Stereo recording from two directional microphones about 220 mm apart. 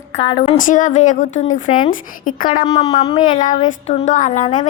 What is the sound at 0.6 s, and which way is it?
A woman's voice, 35° left (ahead or behind).